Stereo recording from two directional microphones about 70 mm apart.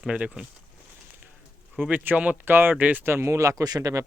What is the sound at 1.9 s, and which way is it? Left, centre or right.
Speech, right.